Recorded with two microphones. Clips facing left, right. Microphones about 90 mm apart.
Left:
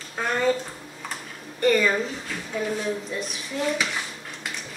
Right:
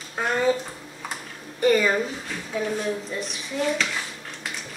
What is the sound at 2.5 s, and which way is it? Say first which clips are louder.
A child's voice: right 1 dB; centre (ahead or behind).